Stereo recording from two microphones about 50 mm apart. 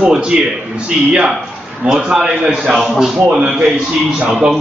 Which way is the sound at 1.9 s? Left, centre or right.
Centre.